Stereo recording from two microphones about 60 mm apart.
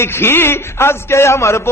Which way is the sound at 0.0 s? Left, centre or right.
Left.